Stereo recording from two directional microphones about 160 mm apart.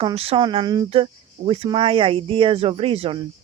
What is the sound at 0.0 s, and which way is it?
Speech, 35° right (ahead or behind).